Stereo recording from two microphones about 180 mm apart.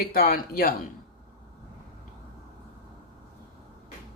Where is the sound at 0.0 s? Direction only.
55° left (ahead or behind).